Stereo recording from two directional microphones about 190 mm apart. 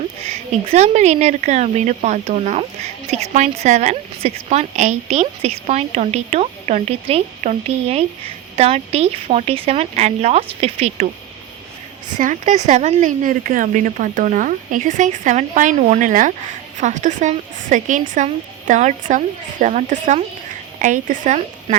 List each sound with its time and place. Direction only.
0.2 s speech: 30° right (ahead or behind)
12.1 s speech: 40° right (ahead or behind)